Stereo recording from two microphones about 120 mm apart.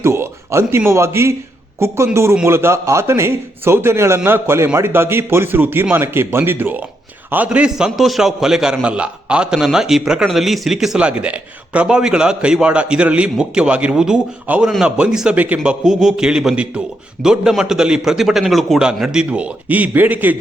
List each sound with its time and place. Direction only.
0.0 s a man's voice: 20° right (ahead or behind)
2.4 s a man's voice: 20° right (ahead or behind)